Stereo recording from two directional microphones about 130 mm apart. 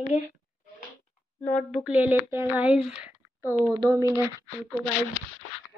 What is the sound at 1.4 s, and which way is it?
Speech, 65° left (ahead or behind).